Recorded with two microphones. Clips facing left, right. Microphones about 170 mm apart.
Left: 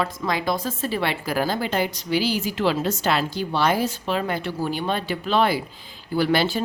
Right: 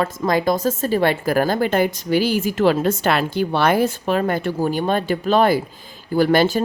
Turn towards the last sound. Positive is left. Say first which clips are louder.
# right 5 dB
turn(degrees=-45)  # may be behind; listen again after turning